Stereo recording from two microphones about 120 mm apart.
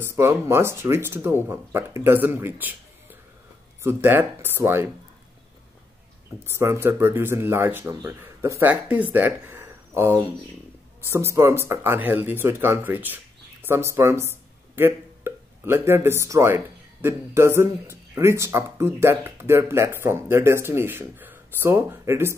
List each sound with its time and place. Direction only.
0.0 s speech: 20° right (ahead or behind)
6.4 s speech: 20° right (ahead or behind)